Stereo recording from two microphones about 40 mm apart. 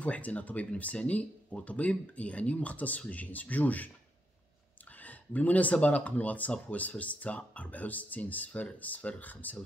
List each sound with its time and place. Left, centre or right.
0.0 s speech: left
5.0 s speech: left